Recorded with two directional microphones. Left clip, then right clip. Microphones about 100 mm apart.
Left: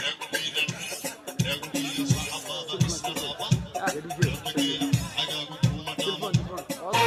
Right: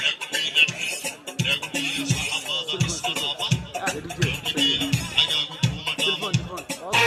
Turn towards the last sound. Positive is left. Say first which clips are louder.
# right 3 dB
turn(degrees=-30)  # may be behind; listen again after turning